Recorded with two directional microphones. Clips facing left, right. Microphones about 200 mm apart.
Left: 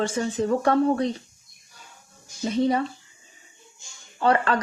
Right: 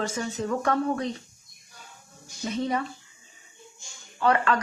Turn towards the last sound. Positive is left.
turn(degrees=30)  # may be behind; listen again after turning